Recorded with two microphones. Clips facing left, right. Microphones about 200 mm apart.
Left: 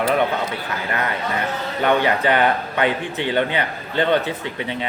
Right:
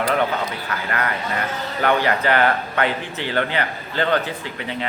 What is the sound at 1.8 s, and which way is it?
Speech, 20° left (ahead or behind).